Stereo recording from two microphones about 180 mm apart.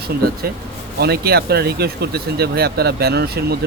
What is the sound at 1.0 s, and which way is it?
Speech, 60° right (ahead or behind).